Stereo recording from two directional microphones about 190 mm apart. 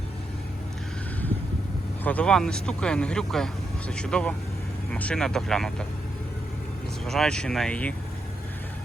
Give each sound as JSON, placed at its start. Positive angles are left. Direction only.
{"t": 2.0, "sound": "speech", "side_deg": 5}
{"t": 7.0, "sound": "speech", "side_deg": 0}